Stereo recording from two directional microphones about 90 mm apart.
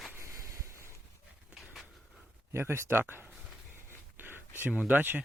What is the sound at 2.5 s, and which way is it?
Speech, 30° right (ahead or behind).